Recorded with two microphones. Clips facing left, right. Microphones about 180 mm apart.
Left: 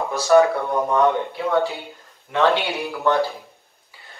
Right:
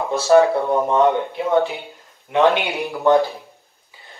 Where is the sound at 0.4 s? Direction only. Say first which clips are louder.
Right 2 dB; 20° right (ahead or behind).